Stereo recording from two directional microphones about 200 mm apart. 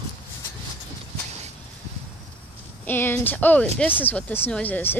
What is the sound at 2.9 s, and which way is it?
Speech, 10° left (ahead or behind).